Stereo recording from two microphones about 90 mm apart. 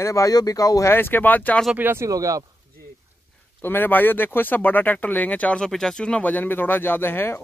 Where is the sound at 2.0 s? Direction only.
40° right (ahead or behind).